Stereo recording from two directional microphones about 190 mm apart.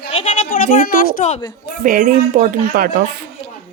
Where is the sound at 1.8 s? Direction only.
45° right (ahead or behind).